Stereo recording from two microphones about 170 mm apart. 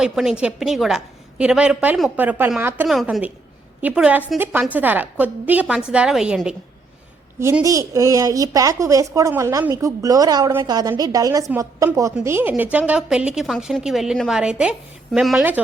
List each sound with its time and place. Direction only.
0.0 s a woman's voice: 5° right (ahead or behind)
2.8 s a woman's voice: centre (ahead or behind)
7.3 s a woman's voice: 15° right (ahead or behind)